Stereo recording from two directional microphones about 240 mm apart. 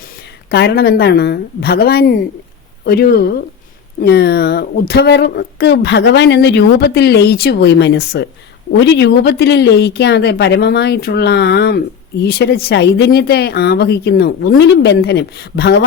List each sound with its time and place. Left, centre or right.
0.5 s a woman's voice: left